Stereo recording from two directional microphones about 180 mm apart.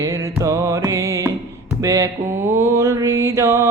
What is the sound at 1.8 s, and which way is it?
Mantra, 15° right (ahead or behind).